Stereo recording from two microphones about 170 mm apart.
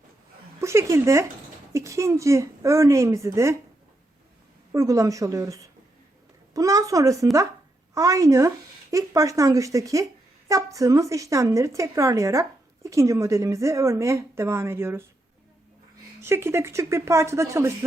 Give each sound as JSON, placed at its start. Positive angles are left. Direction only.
{"t": 0.6, "sound": "a woman's voice", "side_deg": -15}
{"t": 4.7, "sound": "a woman's voice", "side_deg": -15}
{"t": 16.2, "sound": "a woman's voice", "side_deg": -15}